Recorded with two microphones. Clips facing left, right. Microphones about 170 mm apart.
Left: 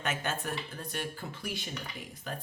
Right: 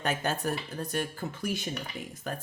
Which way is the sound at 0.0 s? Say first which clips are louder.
Right 4 dB; 35° right (ahead or behind).